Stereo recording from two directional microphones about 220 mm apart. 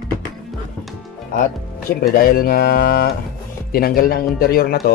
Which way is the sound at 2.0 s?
40° left (ahead or behind).